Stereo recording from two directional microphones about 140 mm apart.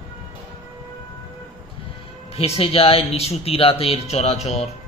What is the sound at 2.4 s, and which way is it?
Speech, 45° left (ahead or behind).